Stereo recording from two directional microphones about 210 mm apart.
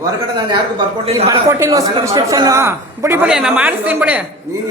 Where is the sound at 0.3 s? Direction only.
20° right (ahead or behind).